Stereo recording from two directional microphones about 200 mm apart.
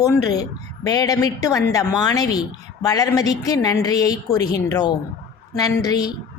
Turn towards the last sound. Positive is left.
turn(degrees=20)  # may be behind; listen again after turning